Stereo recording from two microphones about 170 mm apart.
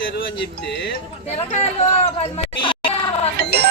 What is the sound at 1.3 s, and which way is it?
Speech, 40° left (ahead or behind).